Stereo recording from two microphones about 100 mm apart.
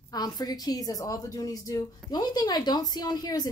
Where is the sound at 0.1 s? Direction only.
40° left (ahead or behind).